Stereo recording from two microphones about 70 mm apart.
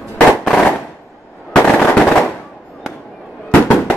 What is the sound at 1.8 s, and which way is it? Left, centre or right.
Machine gun, centre.